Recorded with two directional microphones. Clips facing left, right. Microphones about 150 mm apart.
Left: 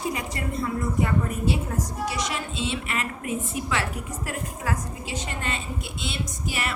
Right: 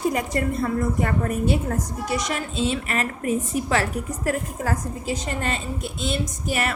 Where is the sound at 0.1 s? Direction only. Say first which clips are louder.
Right 6 dB; 50° right (ahead or behind).